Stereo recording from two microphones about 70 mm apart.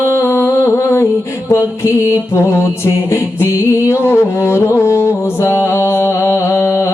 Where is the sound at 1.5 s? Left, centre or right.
Left.